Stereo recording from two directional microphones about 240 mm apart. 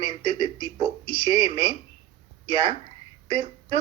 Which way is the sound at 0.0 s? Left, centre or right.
Centre.